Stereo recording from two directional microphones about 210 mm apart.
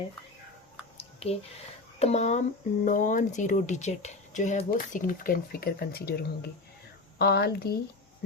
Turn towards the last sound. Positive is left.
turn(degrees=50)  # may be behind; listen again after turning